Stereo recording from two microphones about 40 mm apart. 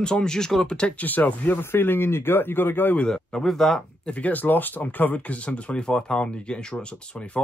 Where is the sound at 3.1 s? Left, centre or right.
Centre.